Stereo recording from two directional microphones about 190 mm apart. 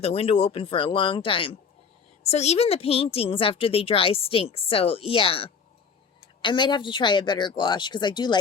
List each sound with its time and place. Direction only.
0.0 s speech: 30° left (ahead or behind)